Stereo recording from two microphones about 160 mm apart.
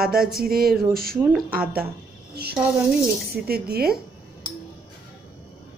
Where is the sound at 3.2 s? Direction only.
75° right (ahead or behind).